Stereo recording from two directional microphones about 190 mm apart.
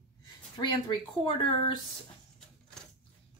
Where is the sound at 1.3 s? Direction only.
25° left (ahead or behind).